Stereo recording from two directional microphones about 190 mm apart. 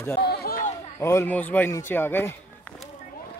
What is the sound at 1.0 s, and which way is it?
A man's voice, 15° left (ahead or behind).